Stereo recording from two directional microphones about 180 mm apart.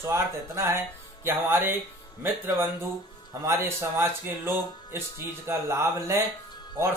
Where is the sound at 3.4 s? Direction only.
15° right (ahead or behind).